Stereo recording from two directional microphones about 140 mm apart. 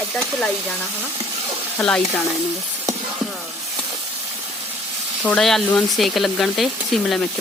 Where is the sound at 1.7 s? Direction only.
5° left (ahead or behind).